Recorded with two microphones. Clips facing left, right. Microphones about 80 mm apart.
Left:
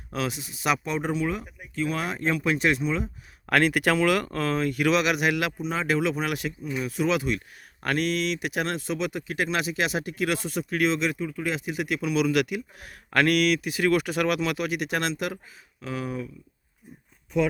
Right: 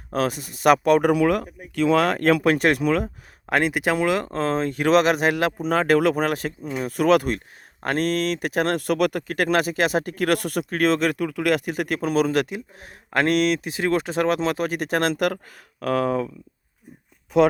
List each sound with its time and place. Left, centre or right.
0.1 s speech: right
3.5 s speech: right
7.3 s speech: right
10.7 s speech: right
15.8 s speech: right
17.3 s speech: right